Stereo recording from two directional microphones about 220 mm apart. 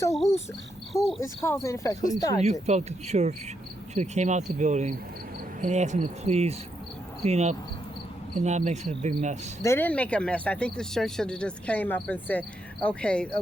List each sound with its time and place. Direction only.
1.2 s speech: 15° left (ahead or behind)
2.4 s speech: 30° right (ahead or behind)
9.6 s speech: 10° left (ahead or behind)